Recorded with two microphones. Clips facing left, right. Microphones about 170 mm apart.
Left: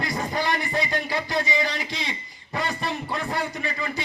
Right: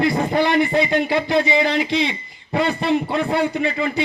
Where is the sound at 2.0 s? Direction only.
60° right (ahead or behind).